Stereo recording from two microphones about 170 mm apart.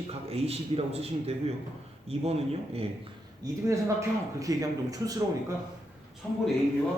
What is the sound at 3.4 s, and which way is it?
A man's voice, 20° right (ahead or behind).